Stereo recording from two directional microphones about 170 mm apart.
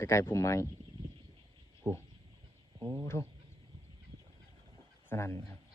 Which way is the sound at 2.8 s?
15° left (ahead or behind).